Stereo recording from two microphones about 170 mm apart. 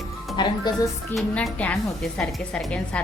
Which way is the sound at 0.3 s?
25° left (ahead or behind).